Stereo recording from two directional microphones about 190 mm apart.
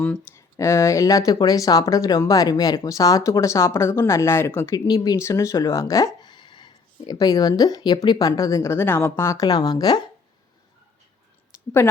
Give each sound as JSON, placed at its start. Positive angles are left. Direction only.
{"t": 0.0, "sound": "speech", "side_deg": 10}
{"t": 6.2, "sound": "a sound", "side_deg": 25}
{"t": 8.0, "sound": "speech", "side_deg": 20}